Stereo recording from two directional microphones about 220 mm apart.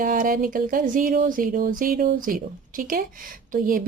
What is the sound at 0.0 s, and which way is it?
A woman's voice, 40° right (ahead or behind).